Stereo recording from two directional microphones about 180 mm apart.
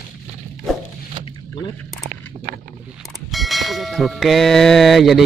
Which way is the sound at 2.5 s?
50° right (ahead or behind).